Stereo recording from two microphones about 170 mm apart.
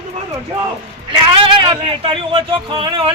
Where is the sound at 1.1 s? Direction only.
30° right (ahead or behind).